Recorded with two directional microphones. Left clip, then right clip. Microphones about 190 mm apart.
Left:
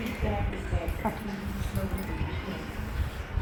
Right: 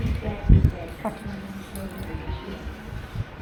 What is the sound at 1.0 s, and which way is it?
Speech, 45° right (ahead or behind).